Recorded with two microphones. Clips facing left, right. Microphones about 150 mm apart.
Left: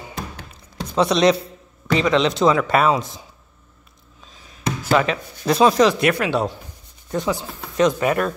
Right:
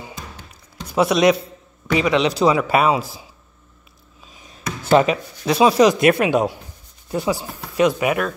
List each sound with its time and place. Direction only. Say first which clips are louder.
0.9 s a man's voice: right 1 dB; 5° right (ahead or behind)
1.9 s speech: even; 10° right (ahead or behind)
5.0 s speech: right 4 dB; 30° right (ahead or behind)
5.4 s speech: right 1 dB; 5° right (ahead or behind)